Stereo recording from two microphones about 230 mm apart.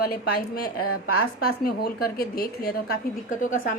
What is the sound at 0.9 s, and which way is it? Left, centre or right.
Speech, left.